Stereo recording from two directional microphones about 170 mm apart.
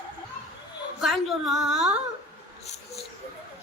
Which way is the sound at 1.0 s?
Centre (ahead or behind).